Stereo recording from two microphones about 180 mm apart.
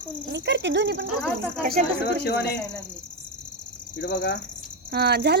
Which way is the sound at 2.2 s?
65° left (ahead or behind).